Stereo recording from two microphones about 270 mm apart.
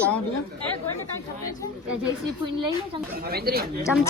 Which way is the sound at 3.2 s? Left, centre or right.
Right.